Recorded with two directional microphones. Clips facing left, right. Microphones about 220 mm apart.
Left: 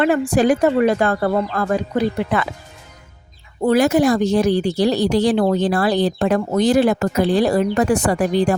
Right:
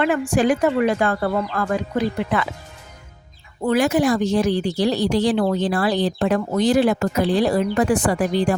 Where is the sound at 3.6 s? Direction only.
40° left (ahead or behind).